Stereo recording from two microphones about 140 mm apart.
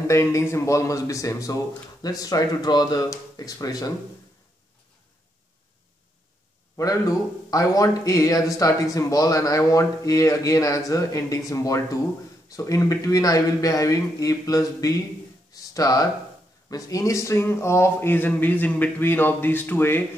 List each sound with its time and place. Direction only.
0.1 s speech: 20° left (ahead or behind)
6.8 s speech: 25° left (ahead or behind)
15.5 s a sound: 25° left (ahead or behind)
16.7 s speech: 25° left (ahead or behind)